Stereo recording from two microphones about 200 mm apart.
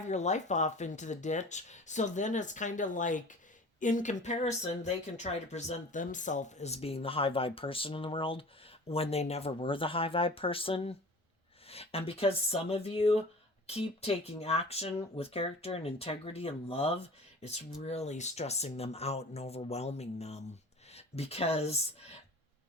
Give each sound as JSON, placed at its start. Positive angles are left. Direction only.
{"t": 0.0, "sound": "speech", "side_deg": 35}